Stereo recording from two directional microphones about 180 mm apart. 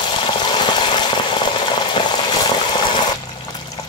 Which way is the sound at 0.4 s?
25° left (ahead or behind).